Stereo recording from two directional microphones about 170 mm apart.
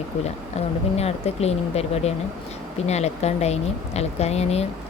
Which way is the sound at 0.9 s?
40° left (ahead or behind).